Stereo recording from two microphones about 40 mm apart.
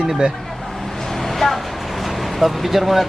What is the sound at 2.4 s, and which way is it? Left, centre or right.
Speech, centre.